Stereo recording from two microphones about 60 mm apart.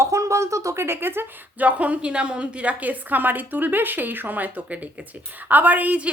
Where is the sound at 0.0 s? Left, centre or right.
Right.